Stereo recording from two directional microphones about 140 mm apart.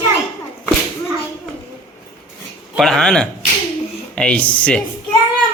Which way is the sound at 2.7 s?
Centre (ahead or behind).